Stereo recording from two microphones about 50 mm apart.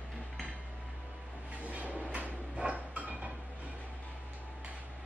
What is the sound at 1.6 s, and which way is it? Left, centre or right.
Train, right.